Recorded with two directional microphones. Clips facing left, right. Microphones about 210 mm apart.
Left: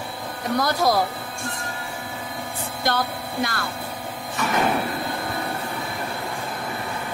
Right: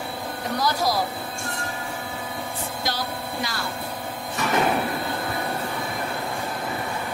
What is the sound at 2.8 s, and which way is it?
Speech, 55° left (ahead or behind).